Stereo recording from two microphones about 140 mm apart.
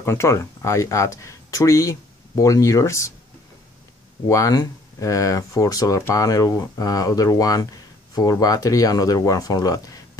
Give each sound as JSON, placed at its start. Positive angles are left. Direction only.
{"t": 0.0, "sound": "speech", "side_deg": 20}
{"t": 4.3, "sound": "speech", "side_deg": 25}